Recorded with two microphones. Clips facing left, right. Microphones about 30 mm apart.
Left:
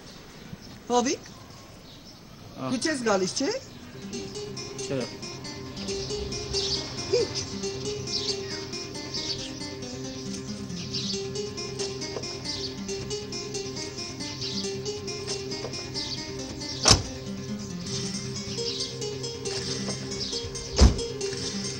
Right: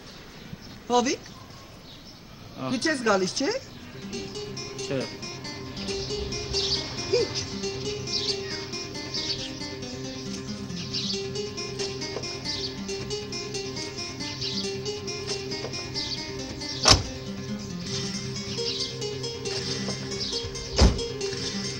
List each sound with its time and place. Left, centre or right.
0.8 s speech: centre
2.6 s speech: centre
4.1 s music: centre